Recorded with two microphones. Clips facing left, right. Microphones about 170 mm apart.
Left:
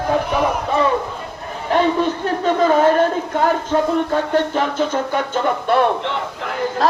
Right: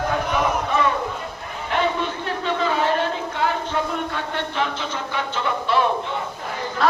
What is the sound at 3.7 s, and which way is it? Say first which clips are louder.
Speech: left 7 dB; 35° left (ahead or behind).